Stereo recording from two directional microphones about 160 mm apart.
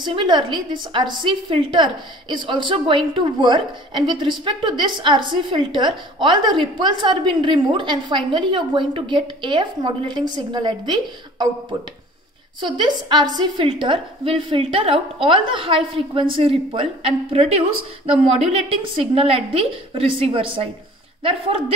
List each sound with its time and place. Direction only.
0.0 s a woman's voice: 30° right (ahead or behind)
13.1 s a woman's voice: 25° right (ahead or behind)